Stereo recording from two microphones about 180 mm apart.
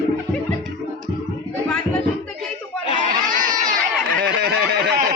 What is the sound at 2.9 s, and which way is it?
Crowd, 45° right (ahead or behind).